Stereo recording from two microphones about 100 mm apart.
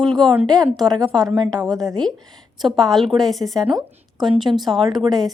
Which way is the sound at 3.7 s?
45° right (ahead or behind).